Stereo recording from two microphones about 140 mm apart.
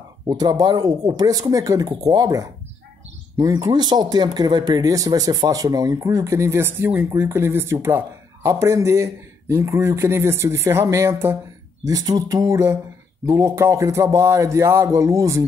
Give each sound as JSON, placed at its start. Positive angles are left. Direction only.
{"t": 0.3, "sound": "speech", "side_deg": -30}